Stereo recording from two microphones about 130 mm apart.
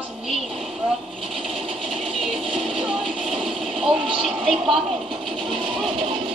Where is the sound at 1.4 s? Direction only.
Centre (ahead or behind).